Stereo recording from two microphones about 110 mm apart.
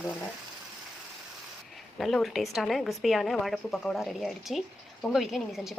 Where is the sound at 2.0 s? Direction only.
Centre (ahead or behind).